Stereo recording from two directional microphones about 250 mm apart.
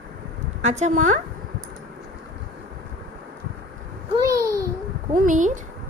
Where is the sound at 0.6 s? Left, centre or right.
Right.